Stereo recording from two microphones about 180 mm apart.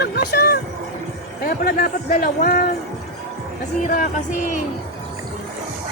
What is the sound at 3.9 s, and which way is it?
Music, 50° left (ahead or behind).